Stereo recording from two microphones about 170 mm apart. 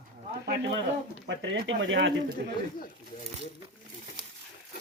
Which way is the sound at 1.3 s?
90° right.